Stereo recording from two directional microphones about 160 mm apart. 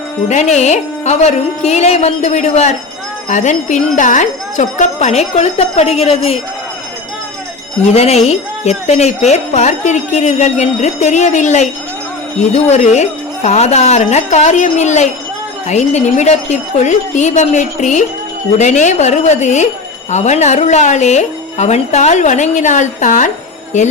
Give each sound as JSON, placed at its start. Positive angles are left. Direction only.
{"t": 0.3, "sound": "speech", "side_deg": 45}
{"t": 7.9, "sound": "speech", "side_deg": 40}